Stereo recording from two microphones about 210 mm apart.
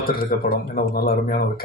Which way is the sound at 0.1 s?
45° left (ahead or behind).